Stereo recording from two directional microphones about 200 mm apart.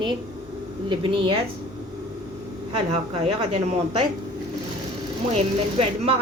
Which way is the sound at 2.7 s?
30° right (ahead or behind).